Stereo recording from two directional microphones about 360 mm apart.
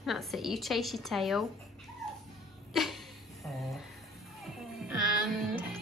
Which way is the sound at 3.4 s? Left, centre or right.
Centre.